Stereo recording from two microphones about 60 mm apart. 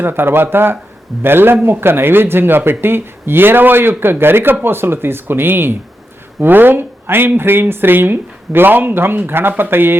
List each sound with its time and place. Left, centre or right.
0.0 s speech: right